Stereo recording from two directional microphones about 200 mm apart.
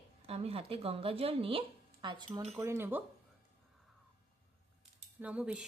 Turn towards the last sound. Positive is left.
turn(degrees=-5)  # may be behind; listen again after turning